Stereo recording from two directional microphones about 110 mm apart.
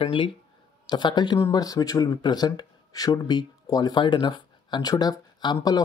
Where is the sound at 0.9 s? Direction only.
40° left (ahead or behind).